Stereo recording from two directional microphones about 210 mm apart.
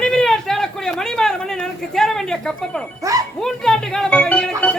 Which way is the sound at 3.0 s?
15° right (ahead or behind).